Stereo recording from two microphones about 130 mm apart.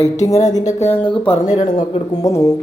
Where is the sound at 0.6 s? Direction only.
65° left (ahead or behind).